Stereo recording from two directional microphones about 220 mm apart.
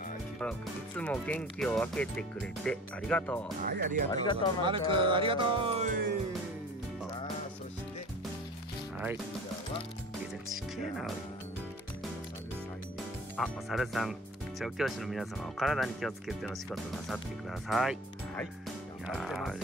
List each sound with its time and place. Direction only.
0.4 s speech: 5° left (ahead or behind)
3.6 s speech: 40° right (ahead or behind)
4.1 s speech: 20° left (ahead or behind)
4.6 s music: 20° right (ahead or behind); by 6.1 s 40° right (ahead or behind)
13.4 s speech: centre (ahead or behind)